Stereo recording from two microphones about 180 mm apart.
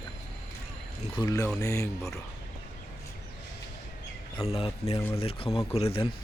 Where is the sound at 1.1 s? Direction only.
25° left (ahead or behind).